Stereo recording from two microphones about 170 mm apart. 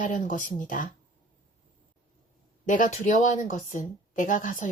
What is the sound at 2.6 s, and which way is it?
A woman's voice, 50° left (ahead or behind).